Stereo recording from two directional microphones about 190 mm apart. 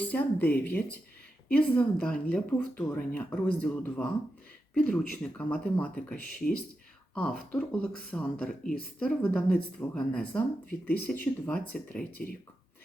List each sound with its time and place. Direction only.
0.0 s speech: 10° left (ahead or behind)